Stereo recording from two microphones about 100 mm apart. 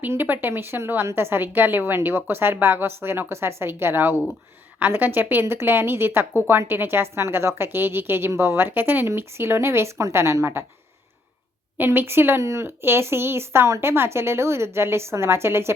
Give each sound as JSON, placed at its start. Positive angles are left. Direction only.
{"t": 0.0, "sound": "a woman's voice", "side_deg": -20}
{"t": 11.8, "sound": "a woman's voice", "side_deg": -20}